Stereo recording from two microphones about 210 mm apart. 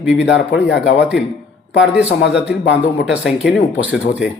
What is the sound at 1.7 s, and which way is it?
Speech, 5° right (ahead or behind).